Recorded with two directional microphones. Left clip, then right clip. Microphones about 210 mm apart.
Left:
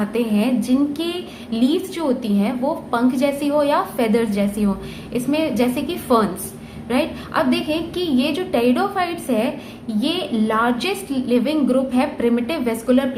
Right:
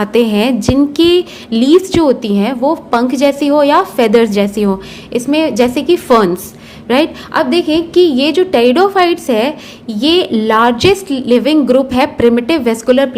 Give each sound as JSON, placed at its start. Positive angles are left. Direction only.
{"t": 0.0, "sound": "a woman's voice", "side_deg": -45}